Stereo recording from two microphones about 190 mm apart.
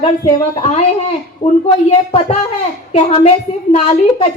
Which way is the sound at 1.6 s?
30° left (ahead or behind).